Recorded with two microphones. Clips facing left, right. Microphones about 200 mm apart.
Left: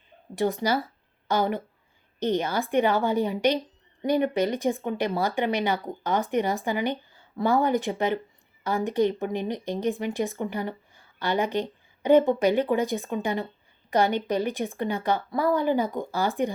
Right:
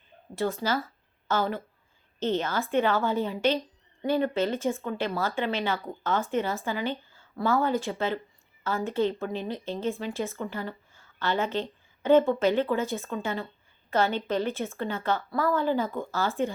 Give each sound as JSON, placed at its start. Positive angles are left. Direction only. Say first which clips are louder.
{"t": 0.3, "sound": "a woman's voice", "louder": "left 3 dB", "side_deg": 15}